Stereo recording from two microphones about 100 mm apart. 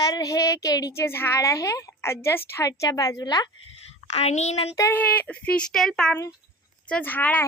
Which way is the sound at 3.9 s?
90° left.